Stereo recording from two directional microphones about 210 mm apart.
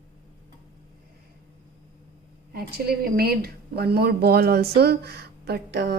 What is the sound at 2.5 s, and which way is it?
A woman's voice, 45° right (ahead or behind).